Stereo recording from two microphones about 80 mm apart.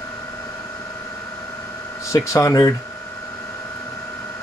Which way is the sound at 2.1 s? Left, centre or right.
Left.